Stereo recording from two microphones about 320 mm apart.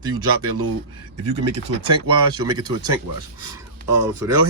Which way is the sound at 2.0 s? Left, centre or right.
Centre.